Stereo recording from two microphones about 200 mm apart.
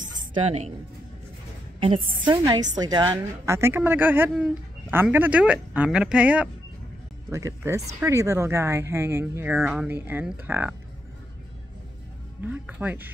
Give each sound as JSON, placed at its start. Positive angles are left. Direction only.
{"t": 0.0, "sound": "music", "side_deg": -40}
{"t": 0.3, "sound": "speech", "side_deg": -35}
{"t": 2.2, "sound": "a woman's voice", "side_deg": -20}
{"t": 12.4, "sound": "speech", "side_deg": -10}